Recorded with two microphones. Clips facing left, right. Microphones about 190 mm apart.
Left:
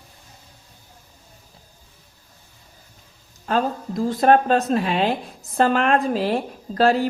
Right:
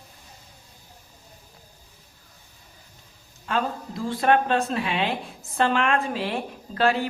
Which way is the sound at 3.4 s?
40° left (ahead or behind).